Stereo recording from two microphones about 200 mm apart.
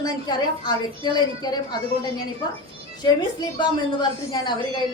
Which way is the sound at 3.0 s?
20° left (ahead or behind).